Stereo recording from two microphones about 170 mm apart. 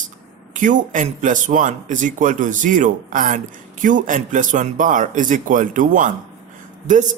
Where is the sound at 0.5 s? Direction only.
50° right (ahead or behind).